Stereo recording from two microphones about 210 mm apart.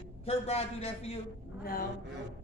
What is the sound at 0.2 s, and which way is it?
Speech, 30° left (ahead or behind).